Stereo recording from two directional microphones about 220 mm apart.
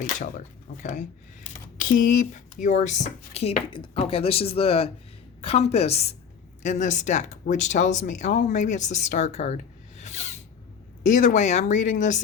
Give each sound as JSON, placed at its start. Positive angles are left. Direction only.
{"t": 0.0, "sound": "speech", "side_deg": 35}
{"t": 11.0, "sound": "speech", "side_deg": 35}